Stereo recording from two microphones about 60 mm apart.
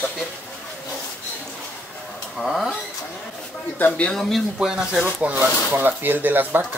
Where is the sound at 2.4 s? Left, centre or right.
Centre.